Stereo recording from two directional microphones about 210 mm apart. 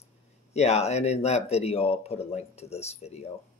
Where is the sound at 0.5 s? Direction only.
30° left (ahead or behind).